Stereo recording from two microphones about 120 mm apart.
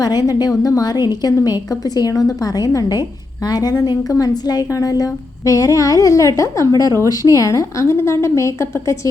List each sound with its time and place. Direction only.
0.0 s a woman's voice: 35° left (ahead or behind)